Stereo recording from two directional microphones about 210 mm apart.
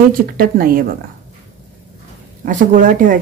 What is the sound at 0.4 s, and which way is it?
Speech, 45° right (ahead or behind).